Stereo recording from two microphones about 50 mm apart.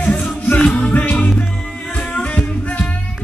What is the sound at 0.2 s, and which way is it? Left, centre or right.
Music, left.